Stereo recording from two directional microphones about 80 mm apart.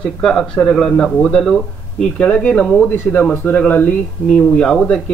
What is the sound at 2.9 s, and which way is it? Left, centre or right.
Speech, left.